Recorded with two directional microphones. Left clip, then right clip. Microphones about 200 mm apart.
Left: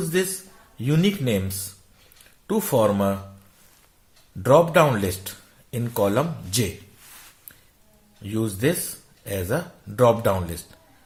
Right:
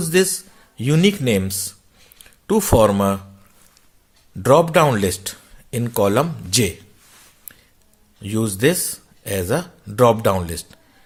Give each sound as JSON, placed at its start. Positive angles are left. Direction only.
{"t": 0.0, "sound": "a man's voice", "side_deg": -45}
{"t": 4.4, "sound": "speech", "side_deg": -45}
{"t": 8.2, "sound": "speech", "side_deg": -50}